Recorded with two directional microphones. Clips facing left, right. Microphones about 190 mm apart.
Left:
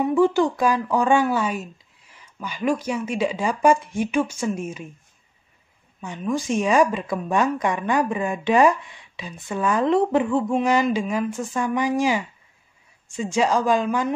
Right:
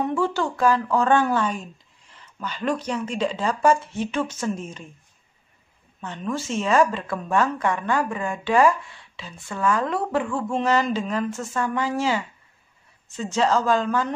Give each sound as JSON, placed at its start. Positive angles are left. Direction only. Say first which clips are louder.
{"t": 0.0, "sound": "speech", "louder": "left 5 dB", "side_deg": 15}
{"t": 5.9, "sound": "speech", "louder": "left 3 dB", "side_deg": 10}